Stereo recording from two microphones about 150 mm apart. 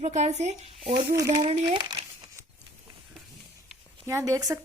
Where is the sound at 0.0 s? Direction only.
50° right (ahead or behind).